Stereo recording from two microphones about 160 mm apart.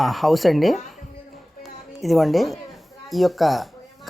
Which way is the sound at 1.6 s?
Centre (ahead or behind).